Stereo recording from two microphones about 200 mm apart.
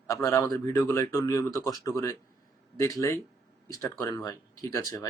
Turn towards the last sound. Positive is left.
turn(degrees=15)  # may be behind; listen again after turning